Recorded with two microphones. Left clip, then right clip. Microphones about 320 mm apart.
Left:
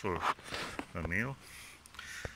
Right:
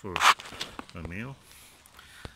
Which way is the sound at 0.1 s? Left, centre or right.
Right.